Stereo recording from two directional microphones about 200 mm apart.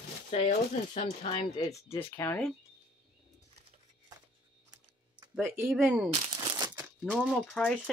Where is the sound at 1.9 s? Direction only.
10° left (ahead or behind).